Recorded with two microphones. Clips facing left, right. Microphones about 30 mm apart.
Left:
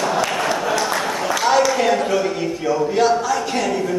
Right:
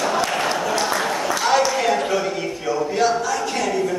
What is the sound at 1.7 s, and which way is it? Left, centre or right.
Speech, centre.